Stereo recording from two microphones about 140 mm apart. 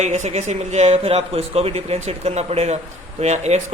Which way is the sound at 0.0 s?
55° right (ahead or behind).